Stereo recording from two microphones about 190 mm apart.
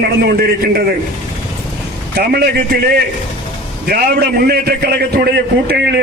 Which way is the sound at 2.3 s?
55° right (ahead or behind).